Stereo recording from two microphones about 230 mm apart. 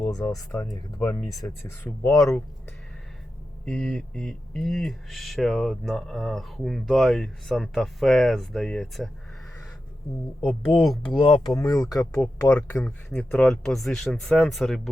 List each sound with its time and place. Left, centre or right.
0.0 s speech: centre
3.7 s speech: centre
10.4 s speech: centre
11.0 s speech: left; by 14.8 s centre